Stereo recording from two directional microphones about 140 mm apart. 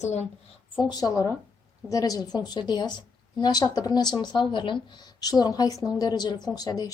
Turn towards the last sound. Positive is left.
turn(degrees=25)  # may be behind; listen again after turning